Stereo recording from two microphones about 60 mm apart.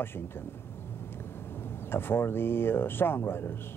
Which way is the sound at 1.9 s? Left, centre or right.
Left.